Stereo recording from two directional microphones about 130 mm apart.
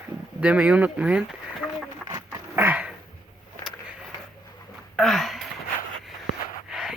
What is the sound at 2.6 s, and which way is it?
Dog, 15° right (ahead or behind).